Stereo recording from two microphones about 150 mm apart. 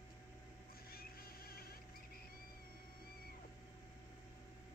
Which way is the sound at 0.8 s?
90° left.